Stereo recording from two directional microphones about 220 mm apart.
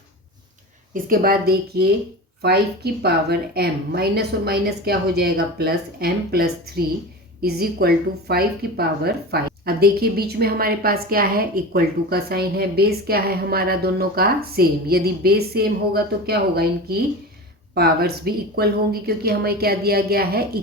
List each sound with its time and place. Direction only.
0.9 s a woman's voice: 40° right (ahead or behind)